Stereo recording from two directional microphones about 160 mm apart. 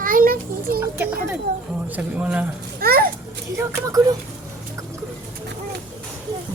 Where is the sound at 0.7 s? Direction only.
15° right (ahead or behind).